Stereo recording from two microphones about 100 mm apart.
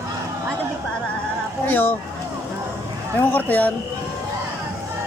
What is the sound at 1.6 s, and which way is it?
Speech, 20° left (ahead or behind).